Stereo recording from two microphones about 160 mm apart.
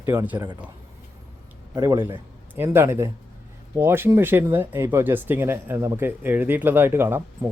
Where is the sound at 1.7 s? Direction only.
25° right (ahead or behind).